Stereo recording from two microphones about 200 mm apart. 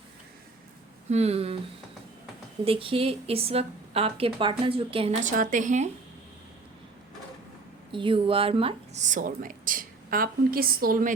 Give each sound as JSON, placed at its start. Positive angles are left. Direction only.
{"t": 1.1, "sound": "a woman's voice", "side_deg": -30}
{"t": 2.6, "sound": "a woman's voice", "side_deg": -25}
{"t": 5.2, "sound": "a woman's voice", "side_deg": -40}
{"t": 7.9, "sound": "a woman's voice", "side_deg": -25}